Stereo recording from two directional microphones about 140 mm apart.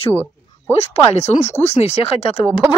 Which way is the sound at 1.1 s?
50° left (ahead or behind).